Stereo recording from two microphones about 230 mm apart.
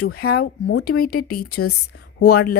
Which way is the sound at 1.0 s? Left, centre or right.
Left.